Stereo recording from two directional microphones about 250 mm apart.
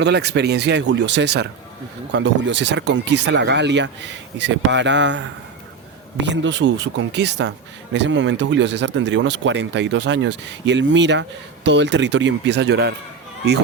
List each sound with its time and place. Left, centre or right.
0.0 s speech: right